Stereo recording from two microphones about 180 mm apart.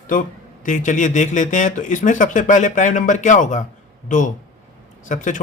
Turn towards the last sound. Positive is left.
turn(degrees=45)  # may be behind; listen again after turning